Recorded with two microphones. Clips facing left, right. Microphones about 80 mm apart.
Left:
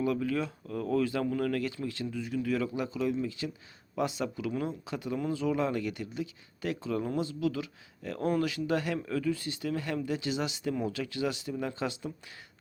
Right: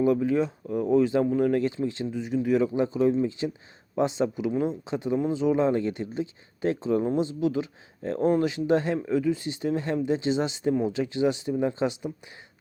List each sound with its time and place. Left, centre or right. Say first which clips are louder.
0.0 s speech: right 7 dB; right